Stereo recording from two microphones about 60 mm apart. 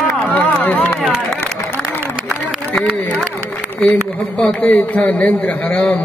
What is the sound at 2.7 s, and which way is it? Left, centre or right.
A man's voice, left.